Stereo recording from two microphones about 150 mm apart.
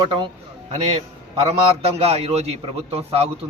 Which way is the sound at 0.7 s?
45° right (ahead or behind).